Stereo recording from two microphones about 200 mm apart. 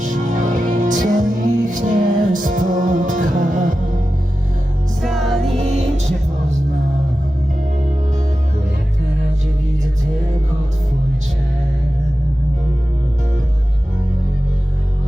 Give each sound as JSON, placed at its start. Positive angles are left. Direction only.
{"t": 0.0, "sound": "music", "side_deg": -40}
{"t": 5.0, "sound": "music", "side_deg": 0}
{"t": 5.5, "sound": "music", "side_deg": -35}